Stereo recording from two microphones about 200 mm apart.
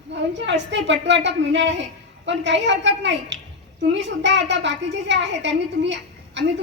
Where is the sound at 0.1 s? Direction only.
60° right (ahead or behind).